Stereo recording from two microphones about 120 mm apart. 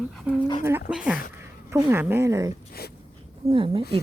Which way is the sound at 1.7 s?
20° right (ahead or behind).